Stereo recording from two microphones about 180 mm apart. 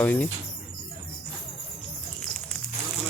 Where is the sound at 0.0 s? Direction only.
10° left (ahead or behind).